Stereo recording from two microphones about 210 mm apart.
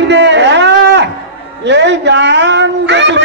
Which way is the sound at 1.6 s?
55° right (ahead or behind).